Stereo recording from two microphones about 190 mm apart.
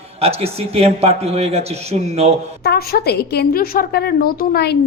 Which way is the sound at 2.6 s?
55° left (ahead or behind).